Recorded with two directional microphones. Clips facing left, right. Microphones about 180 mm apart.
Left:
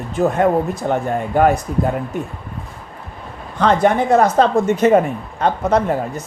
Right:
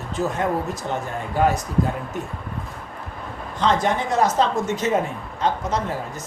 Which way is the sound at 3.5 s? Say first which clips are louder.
Left 6 dB; 55° left (ahead or behind).